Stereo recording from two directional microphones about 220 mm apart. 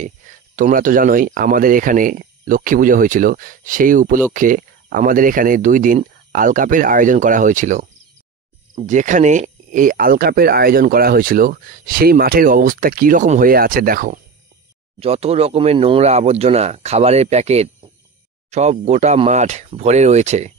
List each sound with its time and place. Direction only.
0.6 s speech: 40° right (ahead or behind)
8.8 s speech: 35° right (ahead or behind)
15.0 s speech: 25° right (ahead or behind)